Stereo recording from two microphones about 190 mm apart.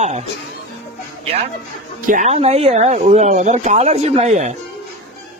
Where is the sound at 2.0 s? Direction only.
40° right (ahead or behind).